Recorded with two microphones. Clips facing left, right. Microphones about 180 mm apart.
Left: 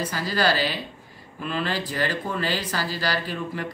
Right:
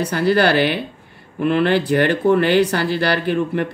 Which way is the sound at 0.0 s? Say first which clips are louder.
Right 8 dB; 65° right (ahead or behind).